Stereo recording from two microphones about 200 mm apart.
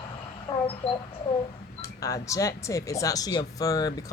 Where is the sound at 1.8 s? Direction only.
15° left (ahead or behind).